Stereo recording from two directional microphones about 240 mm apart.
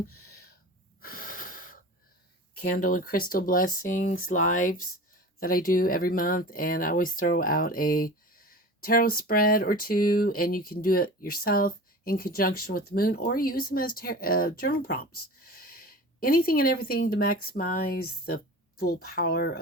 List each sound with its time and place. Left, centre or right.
1.0 s wheeze: left
2.7 s speech: left